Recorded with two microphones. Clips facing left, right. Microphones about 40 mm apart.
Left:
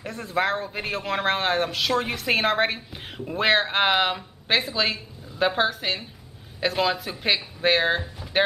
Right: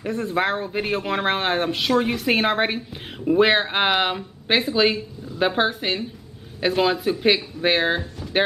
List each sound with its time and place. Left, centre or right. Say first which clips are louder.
0.0 s speech: right 3 dB; centre